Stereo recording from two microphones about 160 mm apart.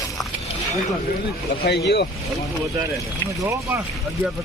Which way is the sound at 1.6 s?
90° left.